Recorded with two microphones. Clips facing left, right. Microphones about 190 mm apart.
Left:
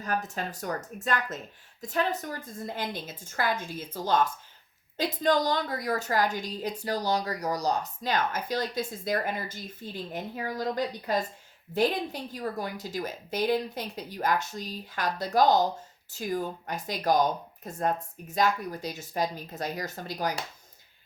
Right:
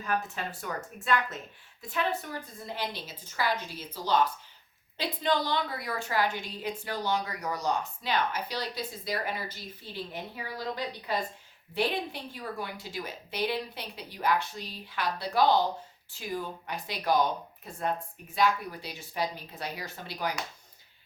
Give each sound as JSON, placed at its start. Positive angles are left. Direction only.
{"t": 0.0, "sound": "a woman's voice", "side_deg": 40}